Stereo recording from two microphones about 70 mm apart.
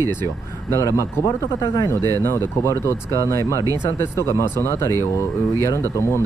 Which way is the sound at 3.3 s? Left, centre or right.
Left.